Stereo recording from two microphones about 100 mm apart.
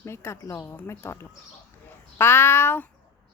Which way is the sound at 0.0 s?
25° left (ahead or behind).